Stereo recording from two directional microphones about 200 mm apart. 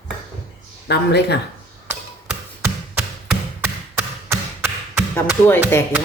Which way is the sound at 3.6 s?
10° right (ahead or behind).